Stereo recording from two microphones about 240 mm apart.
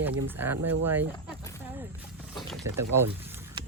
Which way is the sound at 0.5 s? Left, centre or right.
Right.